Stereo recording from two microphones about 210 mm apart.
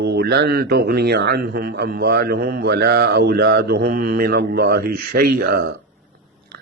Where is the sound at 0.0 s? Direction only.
50° right (ahead or behind).